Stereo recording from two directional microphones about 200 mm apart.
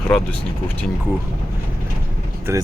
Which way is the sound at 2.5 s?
10° right (ahead or behind).